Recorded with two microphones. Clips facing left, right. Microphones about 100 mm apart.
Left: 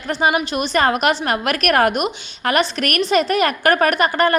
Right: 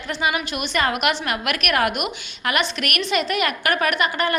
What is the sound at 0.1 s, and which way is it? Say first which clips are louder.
A woman's voice: left 6 dB; 40° left (ahead or behind).